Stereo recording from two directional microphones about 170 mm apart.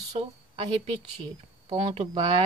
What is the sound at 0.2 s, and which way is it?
Speech, 35° right (ahead or behind).